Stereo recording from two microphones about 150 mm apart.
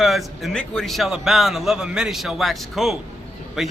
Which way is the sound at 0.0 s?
Centre (ahead or behind).